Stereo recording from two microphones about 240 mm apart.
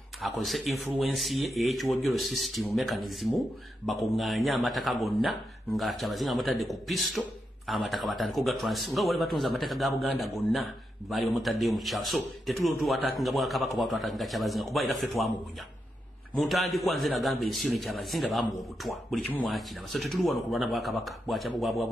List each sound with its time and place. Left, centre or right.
0.2 s speech: centre
16.3 s speech: centre